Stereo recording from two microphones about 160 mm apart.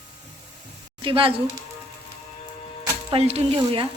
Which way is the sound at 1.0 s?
35° right (ahead or behind).